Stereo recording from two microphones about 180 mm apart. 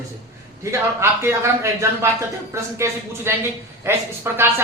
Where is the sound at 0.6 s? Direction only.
15° right (ahead or behind).